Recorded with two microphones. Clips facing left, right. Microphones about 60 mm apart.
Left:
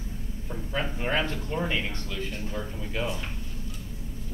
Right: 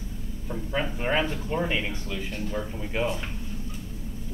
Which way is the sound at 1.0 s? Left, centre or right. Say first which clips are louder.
Right 2 dB; centre.